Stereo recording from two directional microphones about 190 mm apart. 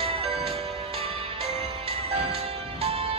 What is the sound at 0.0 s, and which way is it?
Music, 30° right (ahead or behind).